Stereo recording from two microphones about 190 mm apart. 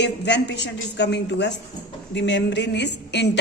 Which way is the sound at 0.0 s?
65° left (ahead or behind).